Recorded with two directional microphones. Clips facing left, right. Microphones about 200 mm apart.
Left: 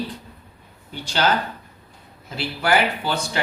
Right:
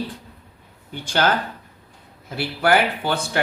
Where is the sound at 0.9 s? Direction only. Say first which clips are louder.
Right 1 dB; 50° right (ahead or behind).